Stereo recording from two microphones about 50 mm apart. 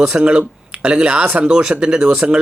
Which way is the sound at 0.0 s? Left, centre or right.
Centre.